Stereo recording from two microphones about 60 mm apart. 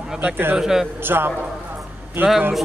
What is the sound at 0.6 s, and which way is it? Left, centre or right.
Speech, centre.